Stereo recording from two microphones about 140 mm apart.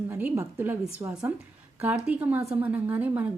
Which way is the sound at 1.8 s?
10° right (ahead or behind).